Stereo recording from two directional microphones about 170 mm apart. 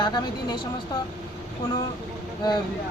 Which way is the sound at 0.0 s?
25° left (ahead or behind).